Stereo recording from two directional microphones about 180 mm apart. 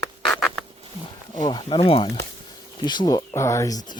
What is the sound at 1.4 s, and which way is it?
Speech, 25° left (ahead or behind).